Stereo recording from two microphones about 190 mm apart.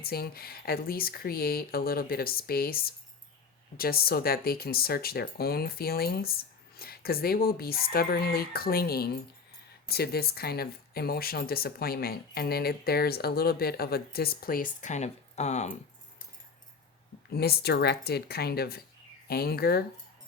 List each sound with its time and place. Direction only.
0.0 s speech: 55° left (ahead or behind)
17.2 s speech: 60° left (ahead or behind)